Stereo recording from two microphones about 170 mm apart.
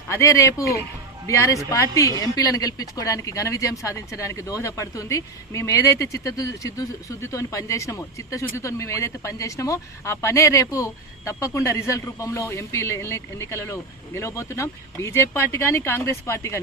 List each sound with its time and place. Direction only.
0.1 s a woman's voice: 15° left (ahead or behind)